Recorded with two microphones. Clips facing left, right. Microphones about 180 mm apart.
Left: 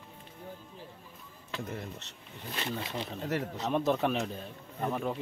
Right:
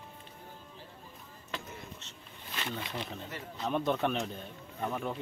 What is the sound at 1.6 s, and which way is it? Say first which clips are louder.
Speech: left 7 dB; 65° left (ahead or behind).